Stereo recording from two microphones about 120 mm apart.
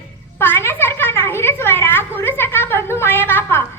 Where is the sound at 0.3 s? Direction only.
20° left (ahead or behind).